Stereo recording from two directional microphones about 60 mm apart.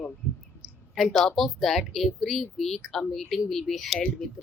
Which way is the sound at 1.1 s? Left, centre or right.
Centre.